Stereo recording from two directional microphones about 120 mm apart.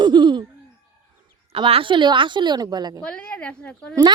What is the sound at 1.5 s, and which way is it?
Speech, 45° right (ahead or behind).